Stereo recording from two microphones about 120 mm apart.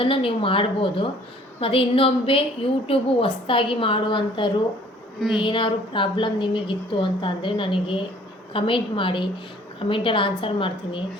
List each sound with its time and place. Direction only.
0.0 s a woman's voice: 50° left (ahead or behind)